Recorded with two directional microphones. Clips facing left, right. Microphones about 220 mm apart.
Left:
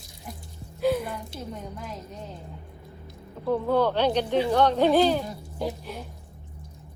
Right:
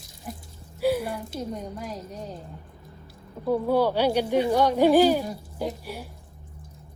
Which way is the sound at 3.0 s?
10° right (ahead or behind).